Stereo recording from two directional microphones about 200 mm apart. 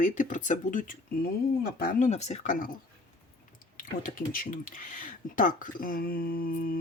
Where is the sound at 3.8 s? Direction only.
45° left (ahead or behind).